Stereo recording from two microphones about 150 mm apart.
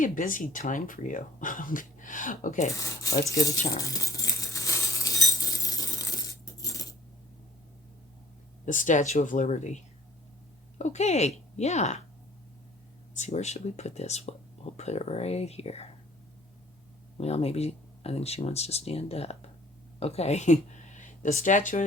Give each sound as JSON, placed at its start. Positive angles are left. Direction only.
{"t": 0.0, "sound": "speech", "side_deg": 60}
{"t": 2.7, "sound": "speech", "side_deg": 20}
{"t": 3.8, "sound": "patter", "side_deg": 20}
{"t": 5.6, "sound": "coin", "side_deg": 25}
{"t": 8.6, "sound": "speech", "side_deg": 55}
{"t": 13.1, "sound": "speech", "side_deg": 50}
{"t": 17.2, "sound": "speech", "side_deg": 45}